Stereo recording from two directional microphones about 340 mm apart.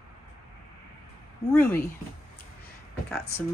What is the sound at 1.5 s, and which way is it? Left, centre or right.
Speech, centre.